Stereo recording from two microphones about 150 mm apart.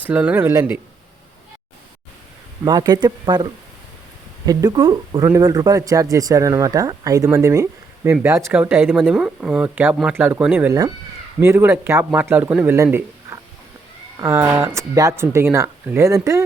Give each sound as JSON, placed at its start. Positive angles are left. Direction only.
{"t": 0.0, "sound": "speech", "side_deg": -10}
{"t": 2.6, "sound": "speech", "side_deg": -25}
{"t": 4.4, "sound": "speech", "side_deg": -25}